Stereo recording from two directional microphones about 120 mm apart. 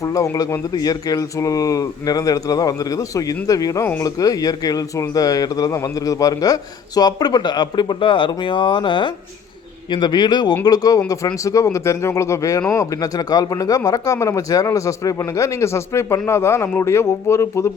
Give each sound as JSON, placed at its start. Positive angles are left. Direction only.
{"t": 0.0, "sound": "speech", "side_deg": 30}